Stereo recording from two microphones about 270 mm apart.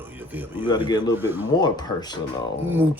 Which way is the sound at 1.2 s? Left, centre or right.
Centre.